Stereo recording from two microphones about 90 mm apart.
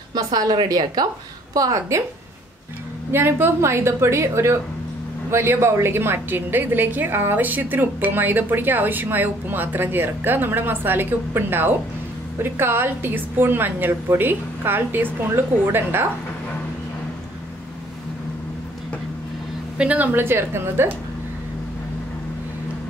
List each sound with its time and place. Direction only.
0.1 s a woman's voice: 50° right (ahead or behind)
3.1 s a woman's voice: 25° right (ahead or behind)
19.8 s a woman's voice: 15° right (ahead or behind)